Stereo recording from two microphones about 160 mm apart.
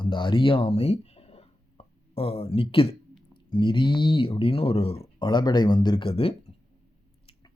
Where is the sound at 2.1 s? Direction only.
40° left (ahead or behind).